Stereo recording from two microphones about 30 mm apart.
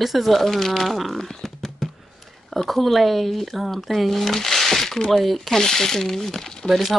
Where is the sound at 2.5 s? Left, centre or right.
Centre.